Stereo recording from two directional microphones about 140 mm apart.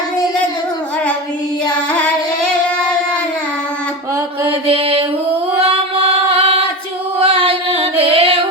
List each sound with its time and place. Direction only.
4.6 s mantra: 45° right (ahead or behind)
6.3 s a capella: 45° right (ahead or behind)
7.2 s music: 40° right (ahead or behind)